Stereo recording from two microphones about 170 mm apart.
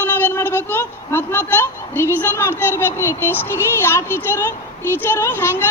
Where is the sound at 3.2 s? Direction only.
15° left (ahead or behind).